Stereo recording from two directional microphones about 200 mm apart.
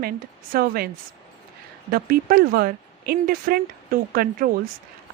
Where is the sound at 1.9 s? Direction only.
45° right (ahead or behind).